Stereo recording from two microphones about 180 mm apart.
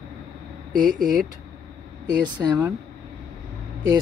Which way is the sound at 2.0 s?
20° right (ahead or behind).